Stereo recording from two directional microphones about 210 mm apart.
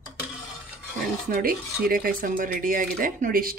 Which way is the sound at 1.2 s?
45° right (ahead or behind).